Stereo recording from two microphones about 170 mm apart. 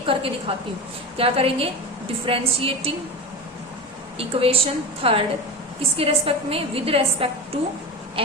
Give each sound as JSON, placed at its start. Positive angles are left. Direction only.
{"t": 0.0, "sound": "a woman's voice", "side_deg": -30}
{"t": 4.2, "sound": "a woman's voice", "side_deg": -35}